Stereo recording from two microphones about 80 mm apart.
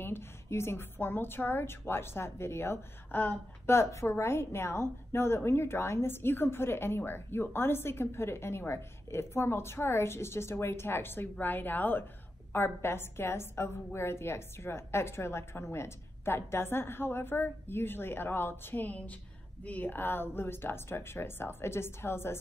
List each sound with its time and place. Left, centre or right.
0.0 s a woman's voice: left